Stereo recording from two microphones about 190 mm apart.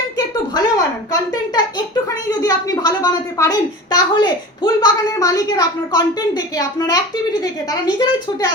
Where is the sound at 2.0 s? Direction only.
15° left (ahead or behind).